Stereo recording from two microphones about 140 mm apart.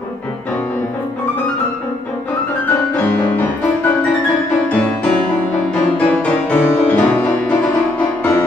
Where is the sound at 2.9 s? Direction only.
10° left (ahead or behind).